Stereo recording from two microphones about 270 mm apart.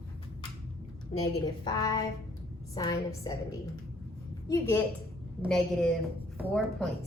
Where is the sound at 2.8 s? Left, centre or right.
Centre.